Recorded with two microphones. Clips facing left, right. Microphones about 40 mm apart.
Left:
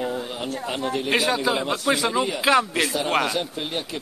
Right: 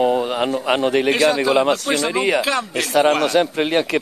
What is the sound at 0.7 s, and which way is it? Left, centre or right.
Speech, right.